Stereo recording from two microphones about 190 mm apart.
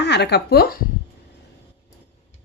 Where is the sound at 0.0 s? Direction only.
60° left (ahead or behind).